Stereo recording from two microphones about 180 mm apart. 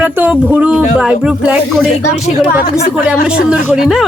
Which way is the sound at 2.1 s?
35° left (ahead or behind).